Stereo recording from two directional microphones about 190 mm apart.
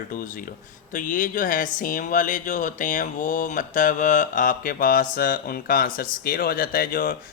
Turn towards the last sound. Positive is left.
turn(degrees=50)  # may be behind; listen again after turning